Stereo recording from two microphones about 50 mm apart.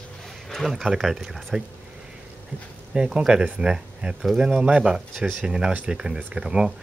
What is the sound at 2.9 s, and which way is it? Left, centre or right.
Speech, centre.